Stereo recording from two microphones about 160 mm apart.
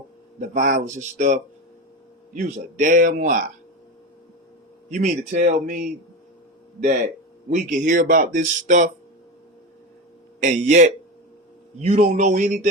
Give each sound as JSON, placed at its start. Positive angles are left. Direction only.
{"t": 0.3, "sound": "speech", "side_deg": -55}
{"t": 4.9, "sound": "speech", "side_deg": -50}
{"t": 7.5, "sound": "speech", "side_deg": -55}
{"t": 10.4, "sound": "a man's voice", "side_deg": -50}